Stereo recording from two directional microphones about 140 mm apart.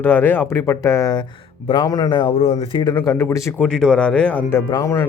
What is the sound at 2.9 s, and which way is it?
Speech, 20° left (ahead or behind).